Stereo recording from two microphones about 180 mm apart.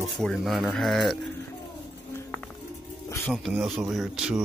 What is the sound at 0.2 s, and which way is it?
Speech, centre (ahead or behind).